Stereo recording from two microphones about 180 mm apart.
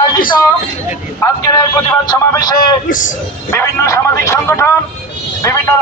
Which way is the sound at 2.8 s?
45° left (ahead or behind).